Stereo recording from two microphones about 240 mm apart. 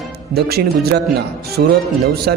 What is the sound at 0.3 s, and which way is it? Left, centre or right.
A man's voice, right.